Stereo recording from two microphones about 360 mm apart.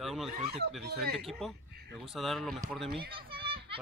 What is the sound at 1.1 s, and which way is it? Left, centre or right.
Speech, centre.